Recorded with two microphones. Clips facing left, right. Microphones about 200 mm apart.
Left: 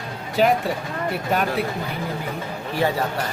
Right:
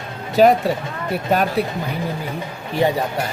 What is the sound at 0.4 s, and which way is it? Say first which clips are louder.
Speech: right 6 dB; 40° right (ahead or behind).